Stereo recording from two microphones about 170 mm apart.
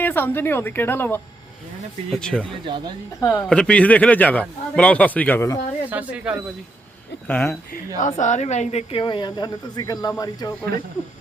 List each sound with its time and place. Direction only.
0.0 s a man's voice: 10° left (ahead or behind)
2.6 s speech: 30° right (ahead or behind)
3.2 s speech: 20° left (ahead or behind)
3.5 s a man's voice: 5° left (ahead or behind)
5.9 s speech: 10° right (ahead or behind)
7.3 s a man's voice: 10° left (ahead or behind)
7.9 s speech: 45° left (ahead or behind); by 10.5 s 20° left (ahead or behind)